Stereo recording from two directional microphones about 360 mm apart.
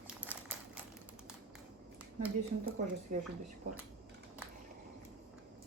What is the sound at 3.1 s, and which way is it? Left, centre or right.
Speech, right.